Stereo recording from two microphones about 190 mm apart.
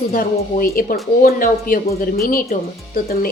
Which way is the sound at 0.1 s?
50° left (ahead or behind).